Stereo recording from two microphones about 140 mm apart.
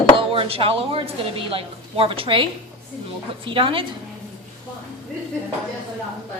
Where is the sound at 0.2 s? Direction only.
40° right (ahead or behind).